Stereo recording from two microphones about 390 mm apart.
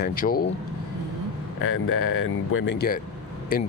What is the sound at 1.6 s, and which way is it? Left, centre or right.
Speech, left.